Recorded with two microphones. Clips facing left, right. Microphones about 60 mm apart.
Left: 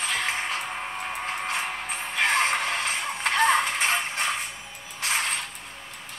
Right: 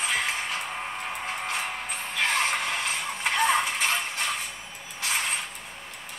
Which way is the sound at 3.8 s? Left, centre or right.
Left.